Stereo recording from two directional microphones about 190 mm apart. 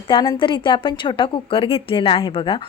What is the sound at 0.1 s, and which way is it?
A woman's voice, 25° left (ahead or behind).